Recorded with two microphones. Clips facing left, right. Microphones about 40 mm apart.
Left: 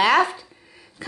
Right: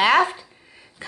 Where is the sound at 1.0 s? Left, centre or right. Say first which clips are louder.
Left 3 dB; right.